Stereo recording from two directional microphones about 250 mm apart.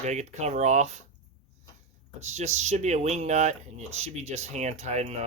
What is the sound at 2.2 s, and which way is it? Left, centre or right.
Speech, right.